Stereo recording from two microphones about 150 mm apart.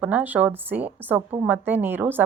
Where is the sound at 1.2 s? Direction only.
35° right (ahead or behind).